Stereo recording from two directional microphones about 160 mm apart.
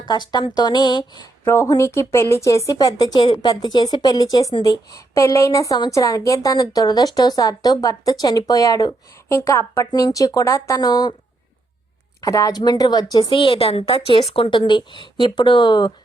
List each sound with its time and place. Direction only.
0.1 s speech: 25° left (ahead or behind)
12.2 s speech: 20° left (ahead or behind)